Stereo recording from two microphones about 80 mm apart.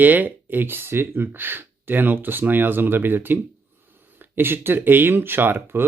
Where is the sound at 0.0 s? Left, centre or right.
Right.